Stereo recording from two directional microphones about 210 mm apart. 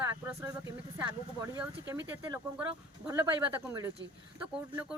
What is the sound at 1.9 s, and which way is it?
Speech, 15° right (ahead or behind).